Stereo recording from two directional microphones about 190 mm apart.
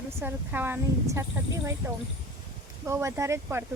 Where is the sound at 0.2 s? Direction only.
10° right (ahead or behind).